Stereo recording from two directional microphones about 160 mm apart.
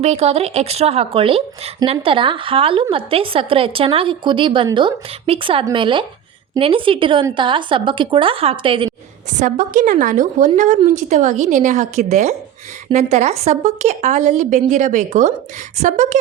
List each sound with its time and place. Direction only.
0.0 s a woman's voice: 40° right (ahead or behind)
9.3 s a woman's voice: 50° right (ahead or behind)